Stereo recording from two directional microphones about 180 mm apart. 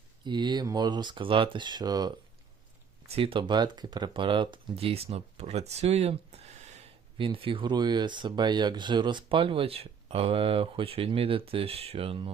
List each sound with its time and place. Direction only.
0.3 s speech: 25° right (ahead or behind)
3.2 s speech: 30° right (ahead or behind)